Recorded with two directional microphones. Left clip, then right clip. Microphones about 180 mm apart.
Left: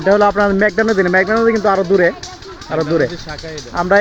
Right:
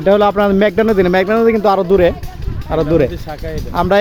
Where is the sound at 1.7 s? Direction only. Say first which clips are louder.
Right 2 dB; 30° right (ahead or behind).